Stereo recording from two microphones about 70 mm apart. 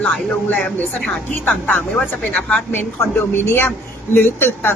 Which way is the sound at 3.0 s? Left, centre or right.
Left.